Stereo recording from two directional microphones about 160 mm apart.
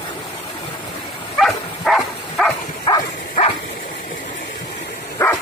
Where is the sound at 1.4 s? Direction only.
Centre (ahead or behind).